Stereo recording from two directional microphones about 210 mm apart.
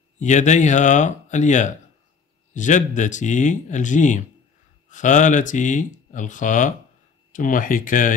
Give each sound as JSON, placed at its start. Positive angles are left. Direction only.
{"t": 0.2, "sound": "speech", "side_deg": 35}